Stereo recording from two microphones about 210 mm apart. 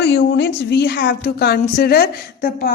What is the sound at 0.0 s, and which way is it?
A woman's voice, 55° left (ahead or behind).